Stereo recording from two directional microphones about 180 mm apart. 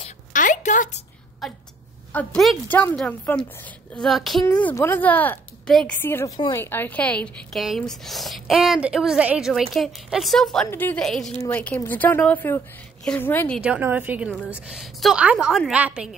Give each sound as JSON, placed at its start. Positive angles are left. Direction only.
{"t": 0.3, "sound": "a sound", "side_deg": 45}
{"t": 1.4, "sound": "a woman's voice", "side_deg": 0}
{"t": 13.6, "sound": "a woman's voice", "side_deg": -10}